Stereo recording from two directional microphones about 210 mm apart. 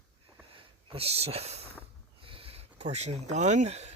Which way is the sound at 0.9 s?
30° right (ahead or behind).